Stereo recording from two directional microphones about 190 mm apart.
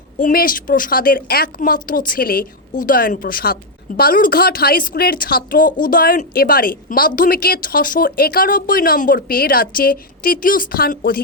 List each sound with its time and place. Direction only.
0.2 s a woman's voice: 50° left (ahead or behind)